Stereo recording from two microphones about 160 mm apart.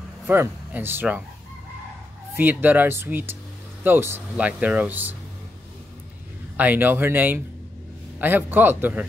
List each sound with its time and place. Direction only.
0.3 s speech: 15° right (ahead or behind)
2.3 s speech: 10° right (ahead or behind)
6.5 s speech: 10° right (ahead or behind)